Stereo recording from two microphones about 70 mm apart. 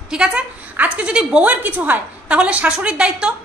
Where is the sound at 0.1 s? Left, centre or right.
Centre.